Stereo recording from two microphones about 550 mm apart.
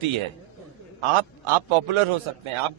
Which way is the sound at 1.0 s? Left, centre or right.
Right.